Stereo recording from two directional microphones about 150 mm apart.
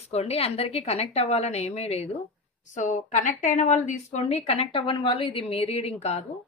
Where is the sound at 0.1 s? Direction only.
45° left (ahead or behind).